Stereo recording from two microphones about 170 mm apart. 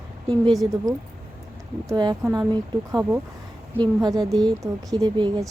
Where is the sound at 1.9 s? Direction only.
25° right (ahead or behind).